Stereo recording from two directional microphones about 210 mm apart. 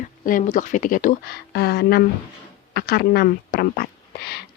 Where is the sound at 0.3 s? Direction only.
40° left (ahead or behind).